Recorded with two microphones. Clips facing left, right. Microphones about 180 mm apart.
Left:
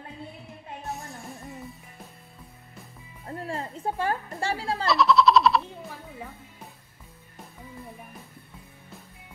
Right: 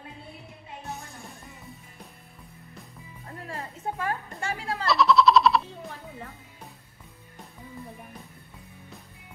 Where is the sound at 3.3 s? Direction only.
35° left (ahead or behind).